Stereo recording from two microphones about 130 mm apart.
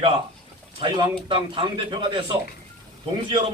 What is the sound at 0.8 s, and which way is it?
Speech, 40° right (ahead or behind).